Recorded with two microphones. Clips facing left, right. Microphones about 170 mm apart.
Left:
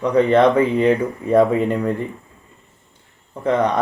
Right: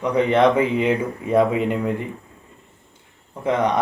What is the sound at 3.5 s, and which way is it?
Speech, 10° right (ahead or behind).